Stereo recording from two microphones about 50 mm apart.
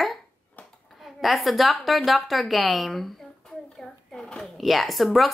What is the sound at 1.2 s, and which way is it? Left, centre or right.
A woman's voice, centre.